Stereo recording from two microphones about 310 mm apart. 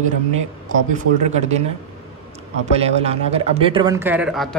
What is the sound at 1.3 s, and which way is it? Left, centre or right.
Speech, right.